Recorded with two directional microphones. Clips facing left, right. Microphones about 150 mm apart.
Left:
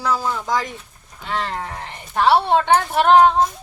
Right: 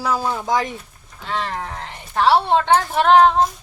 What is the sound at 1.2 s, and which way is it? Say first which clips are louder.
Speech: even; 10° left (ahead or behind).